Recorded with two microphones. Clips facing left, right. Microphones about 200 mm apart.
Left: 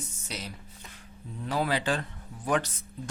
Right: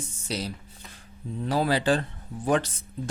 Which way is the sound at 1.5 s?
35° right (ahead or behind).